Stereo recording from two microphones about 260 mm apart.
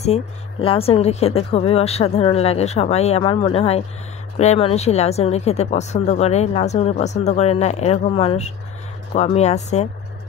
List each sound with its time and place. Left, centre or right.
0.0 s speech: left